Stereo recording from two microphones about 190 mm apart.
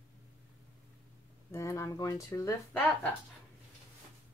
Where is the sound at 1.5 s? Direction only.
15° left (ahead or behind).